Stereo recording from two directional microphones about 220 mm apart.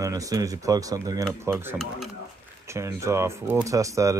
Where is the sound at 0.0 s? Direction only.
15° right (ahead or behind).